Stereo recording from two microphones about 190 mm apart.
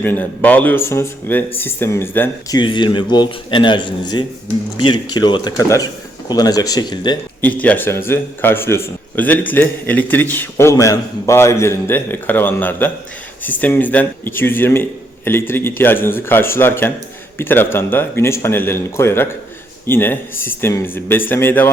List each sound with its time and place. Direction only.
0.0 s a man's voice: 10° left (ahead or behind)
2.6 s speech: 25° left (ahead or behind)
7.6 s a man's voice: 10° left (ahead or behind)